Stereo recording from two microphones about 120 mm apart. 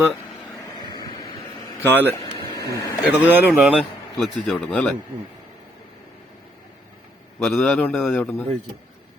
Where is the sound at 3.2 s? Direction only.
10° right (ahead or behind).